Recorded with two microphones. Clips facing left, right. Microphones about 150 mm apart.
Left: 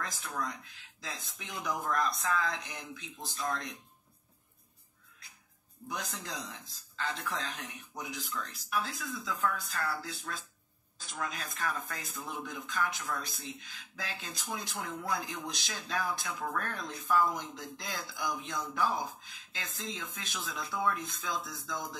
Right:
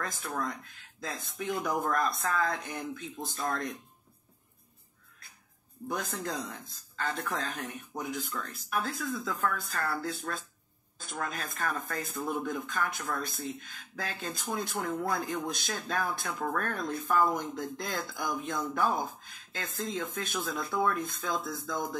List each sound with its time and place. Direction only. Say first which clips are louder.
0.0 s speech: right 3 dB; 50° right (ahead or behind)
5.9 s speech: right 6 dB; 50° right (ahead or behind)